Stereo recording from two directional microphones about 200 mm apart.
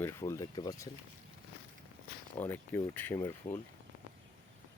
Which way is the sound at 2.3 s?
10° left (ahead or behind).